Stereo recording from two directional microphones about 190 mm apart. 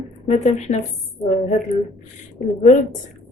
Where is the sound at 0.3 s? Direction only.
35° left (ahead or behind).